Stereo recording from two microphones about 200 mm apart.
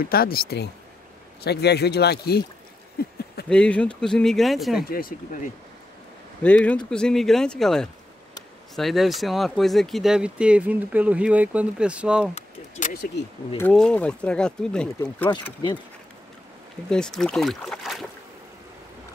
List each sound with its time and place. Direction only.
0.0 s speech: 50° left (ahead or behind)
3.4 s speech: 5° left (ahead or behind)
4.8 s speech: 45° left (ahead or behind)
6.4 s speech: 5° left (ahead or behind)
12.4 s a sound: 40° left (ahead or behind)
13.6 s speech: 5° left (ahead or behind)
16.9 s speech: 5° left (ahead or behind)